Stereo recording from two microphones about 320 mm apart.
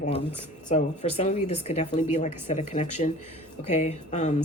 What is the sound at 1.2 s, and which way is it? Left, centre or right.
Speech, left.